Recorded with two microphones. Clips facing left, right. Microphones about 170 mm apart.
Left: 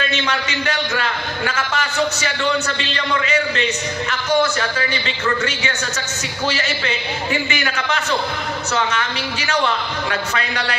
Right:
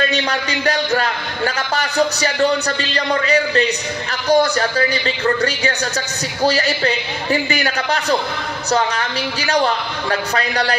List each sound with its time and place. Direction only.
0.1 s a man's voice: 35° right (ahead or behind)